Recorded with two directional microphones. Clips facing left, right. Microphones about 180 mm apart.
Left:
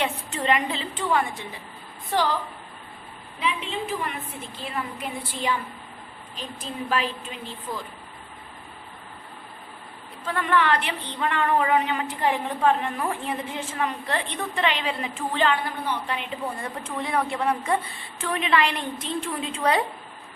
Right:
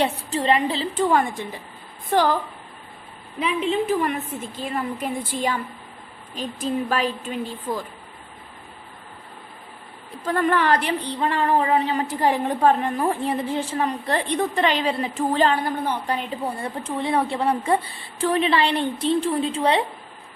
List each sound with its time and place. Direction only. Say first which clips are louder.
0.0 s a woman's voice: right 4 dB; 35° right (ahead or behind); by 2.3 s 50° right (ahead or behind)
3.4 s speech: right 7 dB; 45° right (ahead or behind)
10.2 s a woman's voice: right 3 dB; 40° right (ahead or behind)